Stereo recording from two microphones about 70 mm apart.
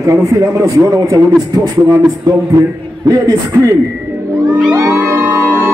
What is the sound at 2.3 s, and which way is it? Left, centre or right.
Music, right.